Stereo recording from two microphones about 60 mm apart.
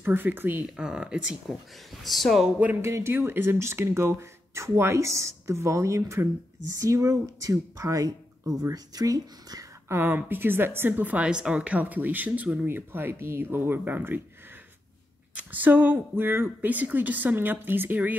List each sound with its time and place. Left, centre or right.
0.0 s speech: right
0.7 s speech: centre
1.9 s speech: centre
2.8 s speech: right
6.7 s speech: right
8.7 s speech: right
9.8 s speech: right
11.2 s speech: centre
12.6 s speech: right
16.7 s speech: right